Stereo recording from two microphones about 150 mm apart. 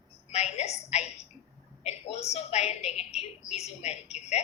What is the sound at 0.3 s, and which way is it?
A woman's voice, 45° left (ahead or behind).